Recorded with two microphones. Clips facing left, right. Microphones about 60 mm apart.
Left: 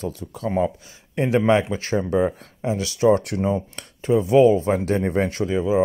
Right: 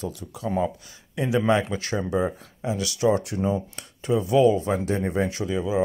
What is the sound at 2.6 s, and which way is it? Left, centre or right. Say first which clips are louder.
Speech: left 4 dB; left.